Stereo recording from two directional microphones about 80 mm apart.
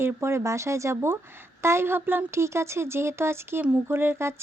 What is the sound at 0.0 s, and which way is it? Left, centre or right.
Speech, right.